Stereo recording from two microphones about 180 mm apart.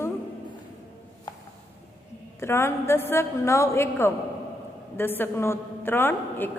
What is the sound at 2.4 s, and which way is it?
A woman's voice, 15° left (ahead or behind).